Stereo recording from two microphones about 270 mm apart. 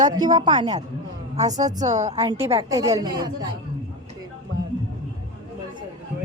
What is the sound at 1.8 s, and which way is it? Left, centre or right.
A woman's voice, right.